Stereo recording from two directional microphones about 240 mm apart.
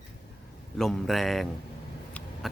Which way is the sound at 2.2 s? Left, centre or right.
Centre.